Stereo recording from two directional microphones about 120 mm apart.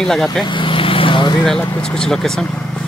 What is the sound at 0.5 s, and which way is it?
Vehicle, 45° left (ahead or behind).